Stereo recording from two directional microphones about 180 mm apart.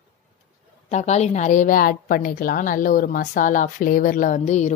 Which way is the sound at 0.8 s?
40° left (ahead or behind).